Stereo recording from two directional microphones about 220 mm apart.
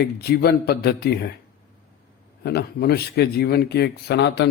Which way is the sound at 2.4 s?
45° left (ahead or behind).